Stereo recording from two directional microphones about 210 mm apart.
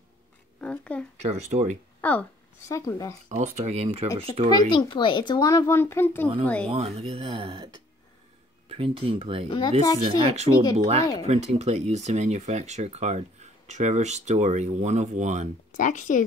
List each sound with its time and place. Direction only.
0.6 s speech: 5° left (ahead or behind)
1.2 s speech: 30° right (ahead or behind)
2.0 s a woman's voice: 5° left (ahead or behind)
3.3 s speech: 35° right (ahead or behind)
4.5 s a child's voice: 20° left (ahead or behind)
6.7 s speech: 30° right (ahead or behind)
9.5 s a child's voice: 20° left (ahead or behind)
10.0 s speech: 30° right (ahead or behind)
15.7 s speech: 40° left (ahead or behind)